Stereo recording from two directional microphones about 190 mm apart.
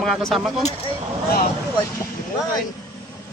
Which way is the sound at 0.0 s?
Centre (ahead or behind).